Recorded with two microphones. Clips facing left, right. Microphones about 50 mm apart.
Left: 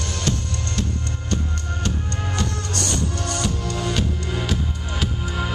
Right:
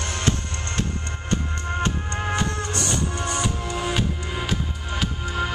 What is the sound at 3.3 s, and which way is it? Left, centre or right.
Music, centre.